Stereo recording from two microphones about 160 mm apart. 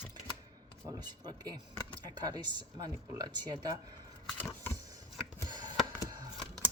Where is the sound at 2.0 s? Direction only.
25° right (ahead or behind).